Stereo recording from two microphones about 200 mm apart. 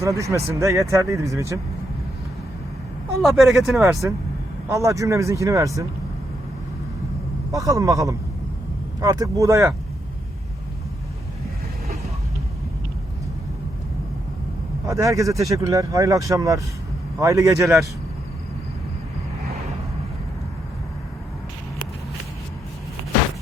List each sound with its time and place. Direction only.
0.0 s speech: 15° right (ahead or behind)
3.2 s speech: centre (ahead or behind)
4.7 s speech: 15° right (ahead or behind)
7.5 s speech: 15° right (ahead or behind)
14.8 s speech: 15° right (ahead or behind)